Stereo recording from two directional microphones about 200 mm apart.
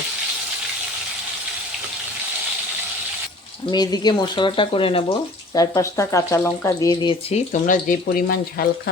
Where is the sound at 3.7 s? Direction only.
20° left (ahead or behind).